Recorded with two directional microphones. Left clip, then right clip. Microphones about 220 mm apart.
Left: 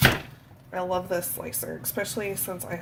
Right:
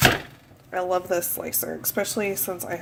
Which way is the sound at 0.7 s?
30° right (ahead or behind).